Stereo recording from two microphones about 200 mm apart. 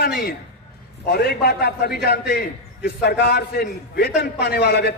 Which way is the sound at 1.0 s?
50° left (ahead or behind).